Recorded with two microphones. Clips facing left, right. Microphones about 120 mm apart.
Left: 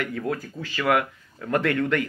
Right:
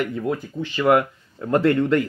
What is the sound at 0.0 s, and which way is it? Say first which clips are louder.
Speech: right 4 dB; 20° right (ahead or behind).